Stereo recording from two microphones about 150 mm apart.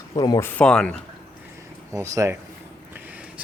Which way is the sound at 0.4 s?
10° left (ahead or behind).